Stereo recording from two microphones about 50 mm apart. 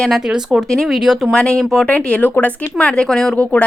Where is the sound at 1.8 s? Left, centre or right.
Left.